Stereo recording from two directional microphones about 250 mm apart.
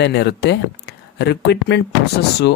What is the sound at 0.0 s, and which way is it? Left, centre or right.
Speech, left.